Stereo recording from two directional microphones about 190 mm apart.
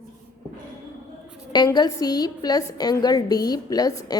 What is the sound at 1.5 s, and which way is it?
A woman's voice, 20° left (ahead or behind).